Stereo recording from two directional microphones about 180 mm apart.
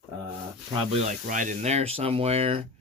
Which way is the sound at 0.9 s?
45° right (ahead or behind).